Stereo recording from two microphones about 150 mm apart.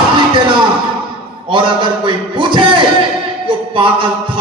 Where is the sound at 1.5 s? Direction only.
30° right (ahead or behind).